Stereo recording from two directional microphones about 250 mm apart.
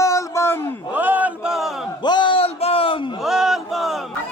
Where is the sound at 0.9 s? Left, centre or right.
Centre.